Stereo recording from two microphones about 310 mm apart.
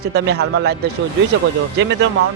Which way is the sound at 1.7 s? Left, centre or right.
Right.